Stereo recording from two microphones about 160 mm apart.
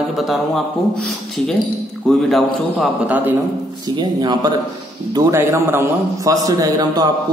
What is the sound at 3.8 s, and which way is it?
A man's voice, 25° right (ahead or behind).